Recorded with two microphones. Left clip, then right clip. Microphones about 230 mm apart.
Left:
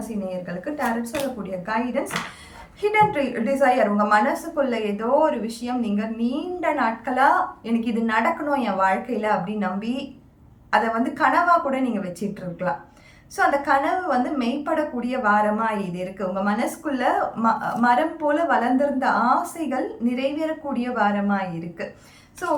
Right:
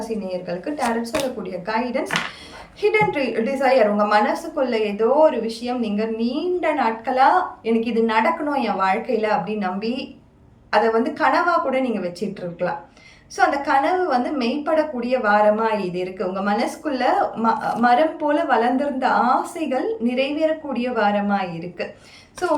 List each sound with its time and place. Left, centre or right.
0.3 s a woman's voice: centre
13.3 s a woman's voice: centre